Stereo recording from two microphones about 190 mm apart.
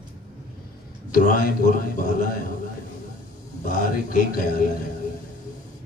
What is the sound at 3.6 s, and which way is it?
A man's voice, 45° left (ahead or behind).